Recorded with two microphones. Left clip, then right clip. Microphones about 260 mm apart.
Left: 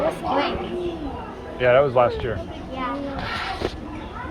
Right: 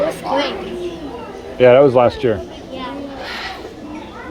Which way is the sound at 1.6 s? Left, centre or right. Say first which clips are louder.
Right 7 dB; right.